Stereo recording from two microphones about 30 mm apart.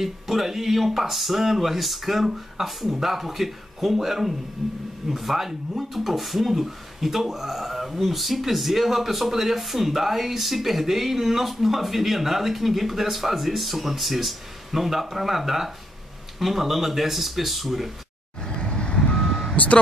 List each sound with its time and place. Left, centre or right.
0.0 s speech: centre
18.7 s reversing beeps: left
19.1 s reversing beeps: centre
19.5 s speech: left